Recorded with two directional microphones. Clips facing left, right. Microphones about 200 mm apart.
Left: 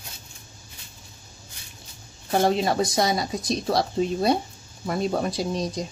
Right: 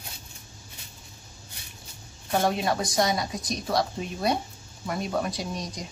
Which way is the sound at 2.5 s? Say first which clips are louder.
Left 4 dB; 25° left (ahead or behind).